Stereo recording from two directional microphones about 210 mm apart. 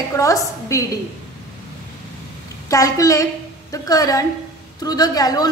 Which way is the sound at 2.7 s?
15° left (ahead or behind).